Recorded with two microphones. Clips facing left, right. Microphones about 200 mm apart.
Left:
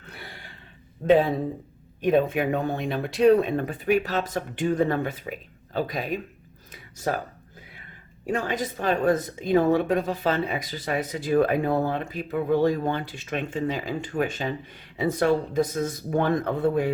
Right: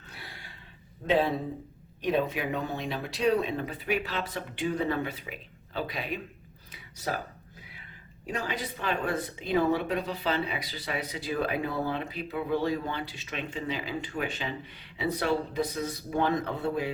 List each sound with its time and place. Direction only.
2.0 s a woman's voice: 50° left (ahead or behind)
6.7 s a sound: 45° left (ahead or behind)
8.3 s a woman's voice: 50° left (ahead or behind)